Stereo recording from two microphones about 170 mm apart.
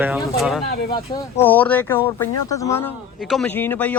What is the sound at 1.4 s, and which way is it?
Speech, 10° left (ahead or behind).